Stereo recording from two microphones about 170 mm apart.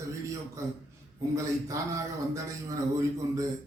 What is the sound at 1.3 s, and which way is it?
A man's voice, 20° right (ahead or behind).